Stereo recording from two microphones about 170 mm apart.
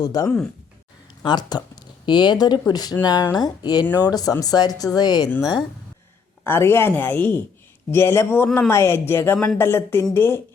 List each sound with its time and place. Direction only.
0.0 s a woman's voice: 20° left (ahead or behind)